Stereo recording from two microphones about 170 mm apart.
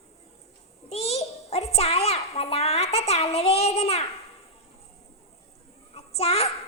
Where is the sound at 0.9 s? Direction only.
35° left (ahead or behind).